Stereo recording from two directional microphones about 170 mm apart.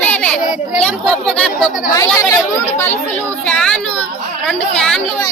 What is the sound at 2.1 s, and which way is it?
Speech, 15° left (ahead or behind).